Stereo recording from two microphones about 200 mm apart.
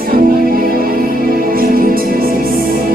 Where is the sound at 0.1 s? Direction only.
45° right (ahead or behind).